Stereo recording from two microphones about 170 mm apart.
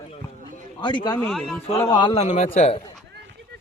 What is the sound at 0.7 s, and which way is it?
Speech, 30° left (ahead or behind).